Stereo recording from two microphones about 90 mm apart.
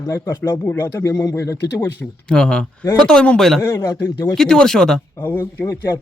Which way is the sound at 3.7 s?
45° left (ahead or behind).